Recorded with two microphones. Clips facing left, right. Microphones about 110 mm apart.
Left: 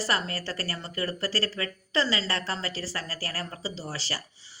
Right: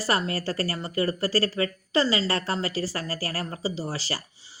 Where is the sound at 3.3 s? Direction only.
30° right (ahead or behind).